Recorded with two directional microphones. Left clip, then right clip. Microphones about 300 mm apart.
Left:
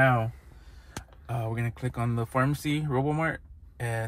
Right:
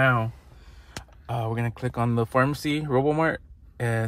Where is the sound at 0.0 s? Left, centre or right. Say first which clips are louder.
Right 1 dB; centre.